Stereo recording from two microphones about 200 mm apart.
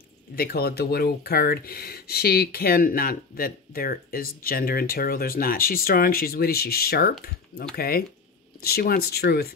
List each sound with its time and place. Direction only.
0.4 s speech: 50° left (ahead or behind)